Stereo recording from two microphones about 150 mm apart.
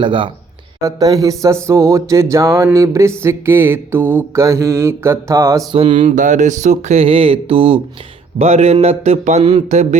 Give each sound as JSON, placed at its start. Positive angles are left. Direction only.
{"t": 0.0, "sound": "mantra", "side_deg": -35}
{"t": 0.8, "sound": "music", "side_deg": -20}
{"t": 3.2, "sound": "mantra", "side_deg": -15}
{"t": 5.7, "sound": "mantra", "side_deg": -35}
{"t": 6.1, "sound": "speech", "side_deg": -60}